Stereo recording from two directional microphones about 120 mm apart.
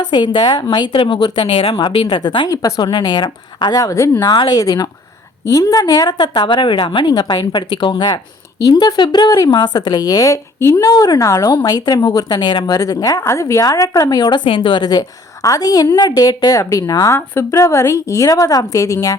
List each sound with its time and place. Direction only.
0.1 s a woman's voice: 40° left (ahead or behind)
2.5 s speech: 30° left (ahead or behind)
4.3 s speech: 35° left (ahead or behind)
7.1 s a woman's voice: 35° left (ahead or behind)